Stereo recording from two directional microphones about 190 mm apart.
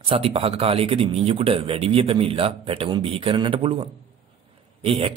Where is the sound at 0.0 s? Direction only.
30° right (ahead or behind).